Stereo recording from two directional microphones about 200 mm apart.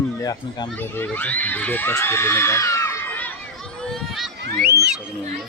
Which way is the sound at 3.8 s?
Centre (ahead or behind).